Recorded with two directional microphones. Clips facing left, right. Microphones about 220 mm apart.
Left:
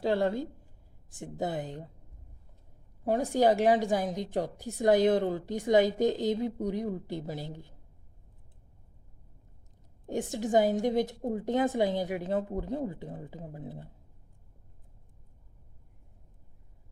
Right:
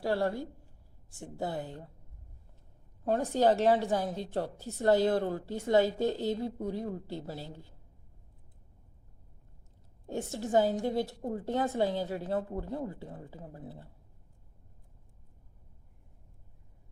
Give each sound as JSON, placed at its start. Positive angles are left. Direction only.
{"t": 0.0, "sound": "a woman's voice", "side_deg": 20}
{"t": 3.0, "sound": "a woman's voice", "side_deg": 10}
{"t": 10.1, "sound": "a woman's voice", "side_deg": 15}